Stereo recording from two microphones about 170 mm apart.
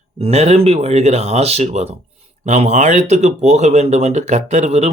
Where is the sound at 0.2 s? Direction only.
40° right (ahead or behind).